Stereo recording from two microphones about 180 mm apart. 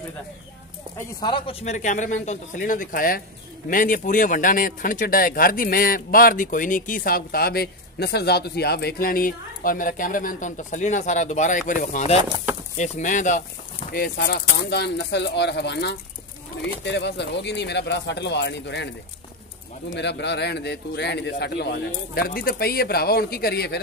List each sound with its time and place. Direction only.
1.2 s speech: 30° left (ahead or behind); by 13.4 s 45° left (ahead or behind)
13.9 s speech: 60° left (ahead or behind)
19.9 s speech: 75° left (ahead or behind)